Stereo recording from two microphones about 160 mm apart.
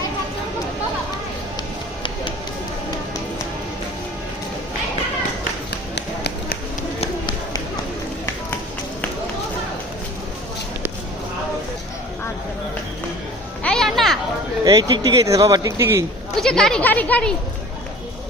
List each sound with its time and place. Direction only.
5.9 s tap: 90° left
7.0 s run: 30° left (ahead or behind)
13.6 s a sound: 5° left (ahead or behind)
14.6 s speech: 25° right (ahead or behind)
16.4 s speech: 5° left (ahead or behind)